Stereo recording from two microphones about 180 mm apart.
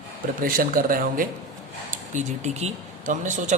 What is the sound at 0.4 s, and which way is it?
A man's voice, 50° right (ahead or behind).